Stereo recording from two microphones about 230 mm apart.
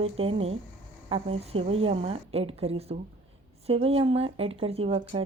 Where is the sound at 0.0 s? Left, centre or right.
Right.